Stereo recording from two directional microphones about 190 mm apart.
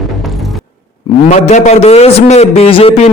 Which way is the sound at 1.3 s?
40° left (ahead or behind).